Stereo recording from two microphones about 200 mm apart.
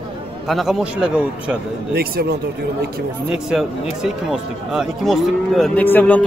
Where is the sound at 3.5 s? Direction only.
Centre (ahead or behind).